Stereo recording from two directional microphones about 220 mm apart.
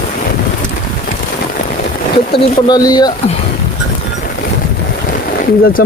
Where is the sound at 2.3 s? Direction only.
20° left (ahead or behind).